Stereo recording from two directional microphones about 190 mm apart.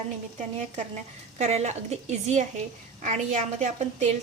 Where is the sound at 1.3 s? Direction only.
35° right (ahead or behind).